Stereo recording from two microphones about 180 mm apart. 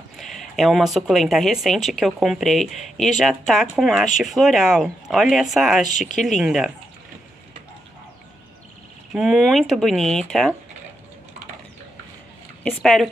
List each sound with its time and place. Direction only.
0.2 s speech: centre (ahead or behind)
5.9 s speech: 45° left (ahead or behind)
6.2 s speech: centre (ahead or behind)
9.1 s speech: centre (ahead or behind)
12.6 s speech: 5° left (ahead or behind)